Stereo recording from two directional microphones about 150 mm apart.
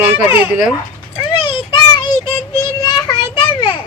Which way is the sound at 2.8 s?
30° left (ahead or behind).